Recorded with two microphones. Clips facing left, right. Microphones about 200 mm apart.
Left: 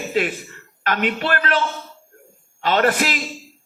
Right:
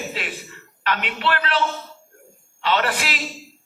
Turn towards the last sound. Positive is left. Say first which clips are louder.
# left 5 dB
turn(degrees=45)  # may be behind; listen again after turning